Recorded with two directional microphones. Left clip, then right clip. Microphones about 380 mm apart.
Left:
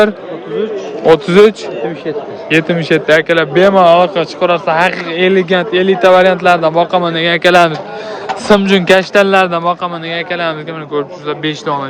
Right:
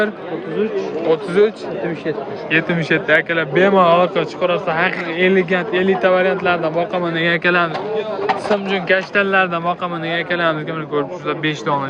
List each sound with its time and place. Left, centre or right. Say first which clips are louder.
1.1 s speech: left 9 dB; centre